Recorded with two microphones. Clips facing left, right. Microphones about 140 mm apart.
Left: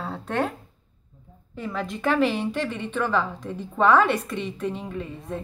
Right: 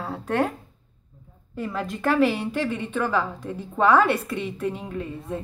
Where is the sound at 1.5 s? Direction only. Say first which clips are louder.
Right 1 dB; 5° right (ahead or behind).